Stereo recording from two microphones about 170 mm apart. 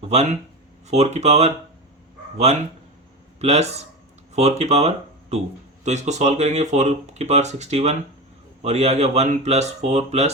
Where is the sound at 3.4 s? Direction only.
40° right (ahead or behind).